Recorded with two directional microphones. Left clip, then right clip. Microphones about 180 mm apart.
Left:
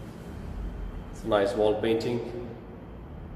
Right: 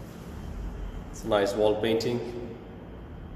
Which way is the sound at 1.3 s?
10° right (ahead or behind).